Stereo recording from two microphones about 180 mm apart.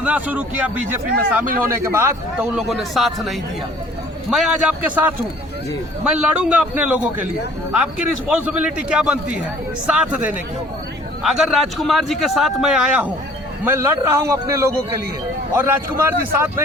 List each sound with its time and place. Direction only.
0.0 s a man's voice: 10° right (ahead or behind)
2.6 s a man's voice: centre (ahead or behind)
6.1 s a man's voice: 5° right (ahead or behind)
11.2 s a man's voice: centre (ahead or behind)